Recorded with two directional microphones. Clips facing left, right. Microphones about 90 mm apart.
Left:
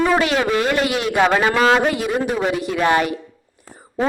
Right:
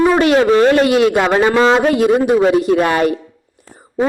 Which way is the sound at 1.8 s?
35° right (ahead or behind).